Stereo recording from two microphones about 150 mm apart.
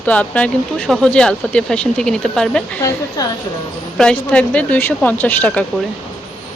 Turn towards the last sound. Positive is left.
turn(degrees=10)  # may be behind; listen again after turning